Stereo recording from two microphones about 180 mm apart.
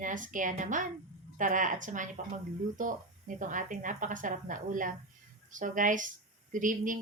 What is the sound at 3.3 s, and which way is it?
A woman's voice, 45° right (ahead or behind).